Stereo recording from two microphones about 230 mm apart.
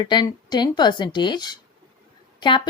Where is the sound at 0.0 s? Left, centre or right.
Centre.